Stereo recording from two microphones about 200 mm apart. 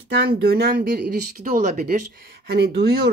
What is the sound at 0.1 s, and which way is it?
Speech, 50° right (ahead or behind).